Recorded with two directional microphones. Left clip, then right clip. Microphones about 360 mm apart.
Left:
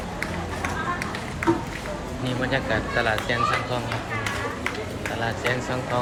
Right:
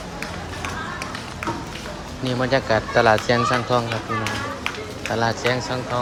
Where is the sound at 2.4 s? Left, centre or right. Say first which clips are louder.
Right 5 dB; centre.